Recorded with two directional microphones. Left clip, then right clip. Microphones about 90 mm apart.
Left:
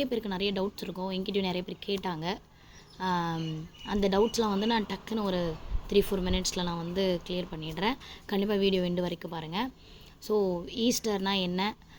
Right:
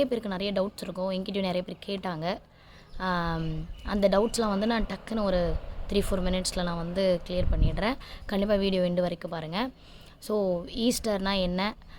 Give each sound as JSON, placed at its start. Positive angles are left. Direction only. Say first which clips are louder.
{"t": 0.0, "sound": "speech", "louder": "right 2 dB", "side_deg": -40}